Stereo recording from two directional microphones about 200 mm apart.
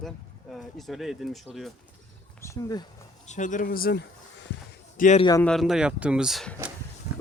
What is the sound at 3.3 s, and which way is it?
Speech, 40° left (ahead or behind).